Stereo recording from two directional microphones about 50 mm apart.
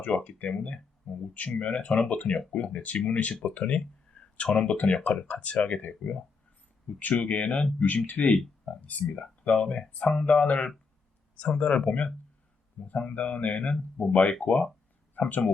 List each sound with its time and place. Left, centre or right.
0.3 s speech: left
1.1 s speech: centre
2.7 s speech: left
4.2 s a sound: centre
4.6 s speech: left